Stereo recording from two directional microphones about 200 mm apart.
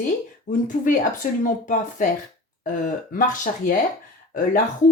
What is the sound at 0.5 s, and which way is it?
Speech, 40° left (ahead or behind).